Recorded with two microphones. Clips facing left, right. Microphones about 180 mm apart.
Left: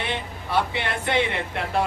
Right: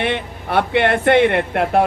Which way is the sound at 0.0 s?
60° right (ahead or behind).